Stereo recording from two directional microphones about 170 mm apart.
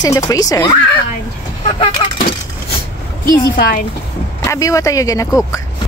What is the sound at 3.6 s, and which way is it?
Speech, 60° left (ahead or behind).